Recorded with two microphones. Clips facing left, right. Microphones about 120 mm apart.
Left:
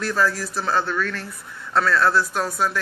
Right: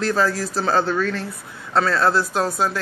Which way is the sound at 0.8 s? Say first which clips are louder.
Right 4 dB; 30° right (ahead or behind).